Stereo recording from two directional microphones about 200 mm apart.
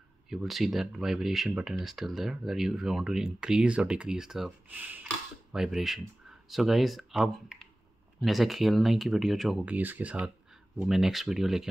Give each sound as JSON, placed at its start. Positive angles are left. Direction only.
{"t": 0.3, "sound": "speech", "side_deg": 0}